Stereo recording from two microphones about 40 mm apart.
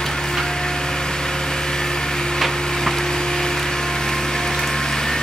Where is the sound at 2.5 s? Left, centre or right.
Centre.